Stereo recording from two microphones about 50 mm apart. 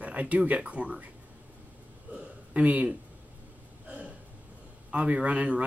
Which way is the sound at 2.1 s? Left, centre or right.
Right.